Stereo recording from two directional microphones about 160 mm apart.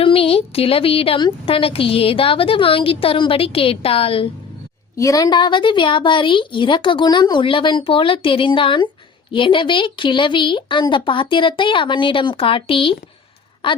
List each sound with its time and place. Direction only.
0.0 s a woman's voice: 35° left (ahead or behind)
4.9 s a woman's voice: 20° left (ahead or behind)